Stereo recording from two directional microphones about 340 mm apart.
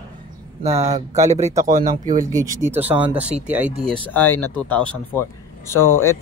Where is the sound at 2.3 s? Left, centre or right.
Centre.